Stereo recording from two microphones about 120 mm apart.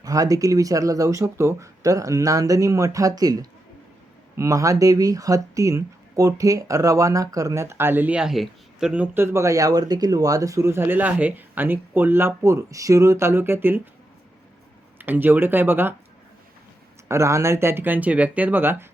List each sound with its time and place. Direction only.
0.0 s speech: 30° right (ahead or behind)
14.9 s speech: 15° right (ahead or behind)
17.1 s speech: 25° right (ahead or behind)